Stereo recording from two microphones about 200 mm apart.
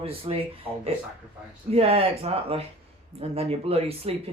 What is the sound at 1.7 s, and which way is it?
Speech, 30° right (ahead or behind).